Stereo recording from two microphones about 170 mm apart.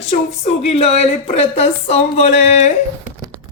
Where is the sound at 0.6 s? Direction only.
35° left (ahead or behind).